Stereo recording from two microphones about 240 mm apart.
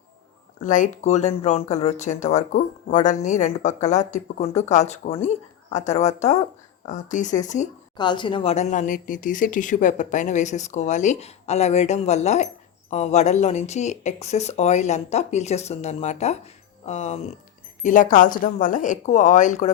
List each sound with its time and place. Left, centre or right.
0.6 s a woman's voice: left
7.9 s a woman's voice: centre